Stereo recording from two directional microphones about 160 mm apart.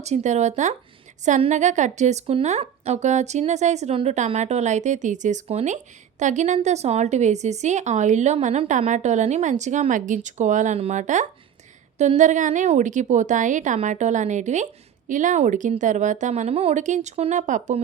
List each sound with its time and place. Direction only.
0.0 s a woman's voice: 45° right (ahead or behind)